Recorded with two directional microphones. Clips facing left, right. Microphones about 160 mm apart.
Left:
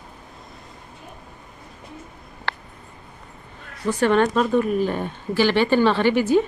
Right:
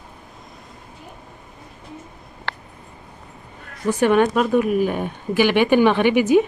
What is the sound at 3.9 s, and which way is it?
Speech, 15° right (ahead or behind).